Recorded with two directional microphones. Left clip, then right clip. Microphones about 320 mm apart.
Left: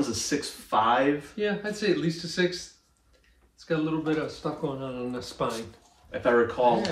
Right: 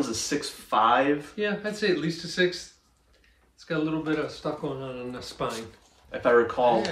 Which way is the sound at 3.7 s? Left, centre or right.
Centre.